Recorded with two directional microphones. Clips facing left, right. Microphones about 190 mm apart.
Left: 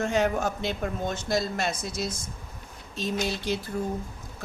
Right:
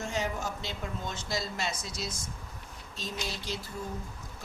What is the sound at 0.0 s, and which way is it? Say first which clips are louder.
Speech: left 8 dB; 60° left (ahead or behind).